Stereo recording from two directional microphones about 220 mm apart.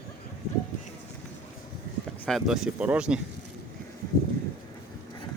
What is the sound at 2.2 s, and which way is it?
Speech, centre (ahead or behind).